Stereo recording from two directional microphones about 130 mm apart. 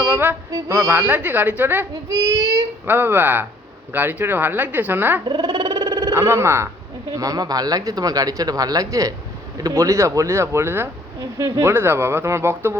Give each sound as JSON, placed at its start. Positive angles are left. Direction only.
{"t": 0.5, "sound": "speech", "side_deg": -30}
{"t": 0.9, "sound": "speech", "side_deg": -15}
{"t": 2.0, "sound": "child singing", "side_deg": -30}
{"t": 2.8, "sound": "speech", "side_deg": -15}
{"t": 5.2, "sound": "speech", "side_deg": -35}